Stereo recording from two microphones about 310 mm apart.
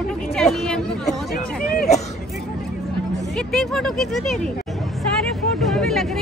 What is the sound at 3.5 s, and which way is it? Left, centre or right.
Speech, centre.